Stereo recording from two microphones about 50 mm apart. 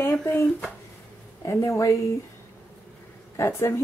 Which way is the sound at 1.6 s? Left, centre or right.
Left.